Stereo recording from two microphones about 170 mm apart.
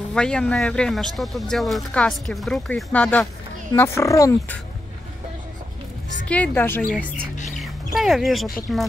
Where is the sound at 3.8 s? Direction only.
15° left (ahead or behind).